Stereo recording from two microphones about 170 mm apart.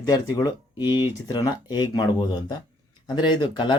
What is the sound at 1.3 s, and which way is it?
Speech, 25° left (ahead or behind).